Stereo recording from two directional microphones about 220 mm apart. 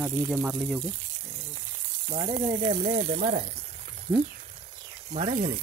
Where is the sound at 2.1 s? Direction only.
30° right (ahead or behind).